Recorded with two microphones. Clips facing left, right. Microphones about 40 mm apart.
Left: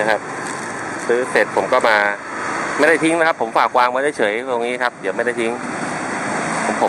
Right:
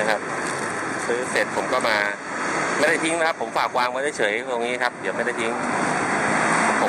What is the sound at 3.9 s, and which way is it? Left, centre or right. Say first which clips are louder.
Speech: left 5 dB; centre.